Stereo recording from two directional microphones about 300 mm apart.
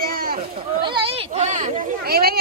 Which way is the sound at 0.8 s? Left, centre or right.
Centre.